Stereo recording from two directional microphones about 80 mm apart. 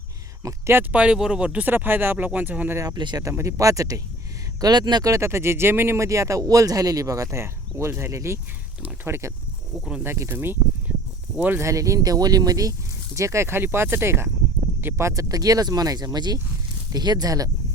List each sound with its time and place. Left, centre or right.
0.4 s speech: right
0.9 s speech: centre
2.7 s speech: right
4.6 s speech: right
5.1 s speech: right
11.6 s speech: right
11.9 s speech: right
13.1 s speech: right